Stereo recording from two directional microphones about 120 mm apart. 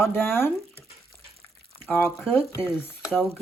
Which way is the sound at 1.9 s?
15° left (ahead or behind).